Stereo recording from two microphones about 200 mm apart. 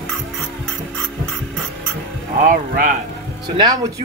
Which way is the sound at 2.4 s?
45° right (ahead or behind).